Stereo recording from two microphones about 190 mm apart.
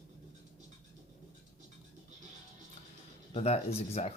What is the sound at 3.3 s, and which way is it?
Speech, 35° left (ahead or behind).